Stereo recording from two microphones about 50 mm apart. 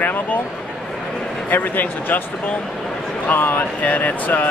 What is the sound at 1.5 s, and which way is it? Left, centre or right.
Speech, left.